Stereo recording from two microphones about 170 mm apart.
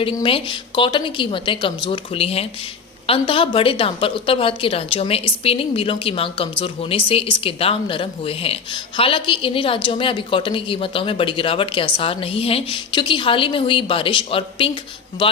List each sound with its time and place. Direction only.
0.0 s a woman's voice: 30° left (ahead or behind)